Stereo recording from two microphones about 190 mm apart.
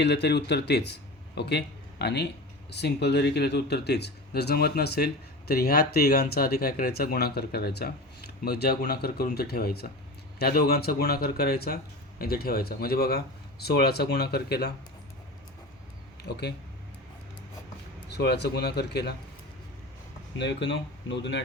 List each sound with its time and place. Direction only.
0.0 s speech: 65° left (ahead or behind)
16.2 s speech: 60° left (ahead or behind)
18.1 s speech: 60° left (ahead or behind)
20.4 s speech: 70° left (ahead or behind)